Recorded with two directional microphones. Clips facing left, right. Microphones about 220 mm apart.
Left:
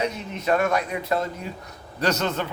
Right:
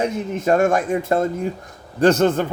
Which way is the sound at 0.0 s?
50° right (ahead or behind).